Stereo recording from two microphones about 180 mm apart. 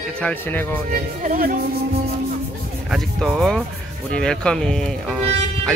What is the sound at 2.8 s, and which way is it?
Speech, centre (ahead or behind).